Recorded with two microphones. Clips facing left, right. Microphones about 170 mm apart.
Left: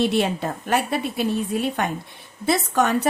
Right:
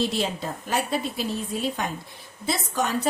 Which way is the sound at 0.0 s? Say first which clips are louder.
Left 5 dB; 65° left (ahead or behind).